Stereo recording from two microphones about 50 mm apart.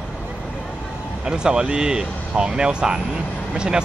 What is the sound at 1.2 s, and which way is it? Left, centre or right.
Speech, centre.